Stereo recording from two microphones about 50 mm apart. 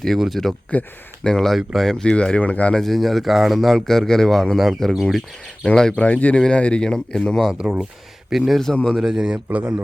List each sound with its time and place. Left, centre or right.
0.4 s speech: centre
0.7 s speech: left
1.2 s speech: centre
2.7 s speech: centre
6.0 s speech: left; by 7.3 s centre
7.6 s speech: centre
8.7 s speech: left
9.0 s speech: centre